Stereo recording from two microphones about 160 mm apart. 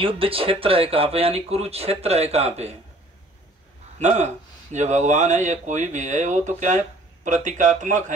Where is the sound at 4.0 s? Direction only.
45° right (ahead or behind).